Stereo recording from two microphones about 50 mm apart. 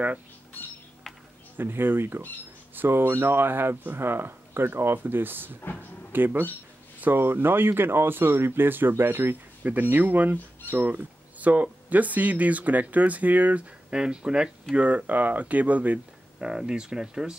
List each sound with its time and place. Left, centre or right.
1.6 s speech: right
5.8 s a sound: right
7.0 s speech: right
16.3 s speech: centre